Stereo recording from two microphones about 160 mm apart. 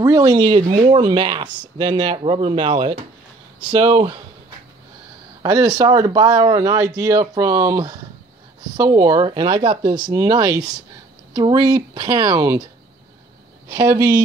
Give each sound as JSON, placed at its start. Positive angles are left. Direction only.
{"t": 0.0, "sound": "speech", "side_deg": -20}
{"t": 5.4, "sound": "speech", "side_deg": -25}
{"t": 13.9, "sound": "speech", "side_deg": -25}